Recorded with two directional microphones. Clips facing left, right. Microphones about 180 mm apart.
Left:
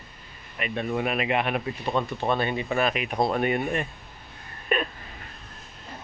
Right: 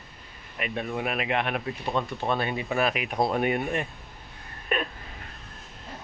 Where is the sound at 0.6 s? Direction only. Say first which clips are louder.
Left 3 dB; centre (ahead or behind).